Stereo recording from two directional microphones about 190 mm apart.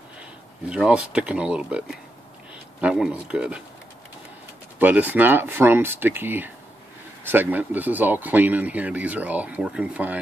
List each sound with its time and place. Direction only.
0.7 s speech: 5° right (ahead or behind)
4.7 s speech: 10° right (ahead or behind)